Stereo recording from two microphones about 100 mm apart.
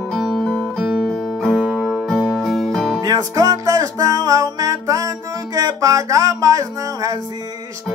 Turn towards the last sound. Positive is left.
turn(degrees=-35)  # may be behind; listen again after turning